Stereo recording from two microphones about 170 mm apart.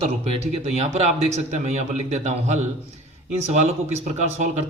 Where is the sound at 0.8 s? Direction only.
40° right (ahead or behind).